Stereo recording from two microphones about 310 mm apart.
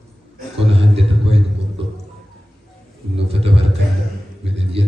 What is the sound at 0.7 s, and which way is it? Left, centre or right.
Speech, centre.